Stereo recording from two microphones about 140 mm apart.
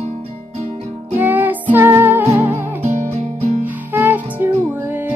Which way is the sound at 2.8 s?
55° right (ahead or behind).